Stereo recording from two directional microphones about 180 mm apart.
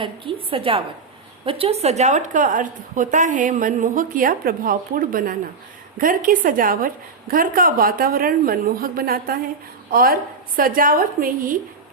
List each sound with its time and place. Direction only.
0.5 s a woman's voice: 30° right (ahead or behind); by 11.5 s 50° right (ahead or behind)